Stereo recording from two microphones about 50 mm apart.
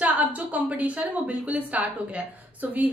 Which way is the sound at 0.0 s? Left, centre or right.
Right.